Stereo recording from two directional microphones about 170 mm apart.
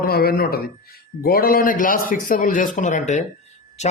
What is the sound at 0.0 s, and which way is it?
A man's voice, 65° left (ahead or behind).